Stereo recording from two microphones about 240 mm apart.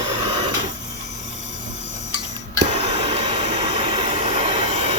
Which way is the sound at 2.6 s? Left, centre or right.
Right.